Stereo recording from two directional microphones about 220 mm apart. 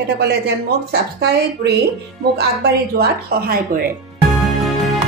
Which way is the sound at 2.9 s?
45° right (ahead or behind).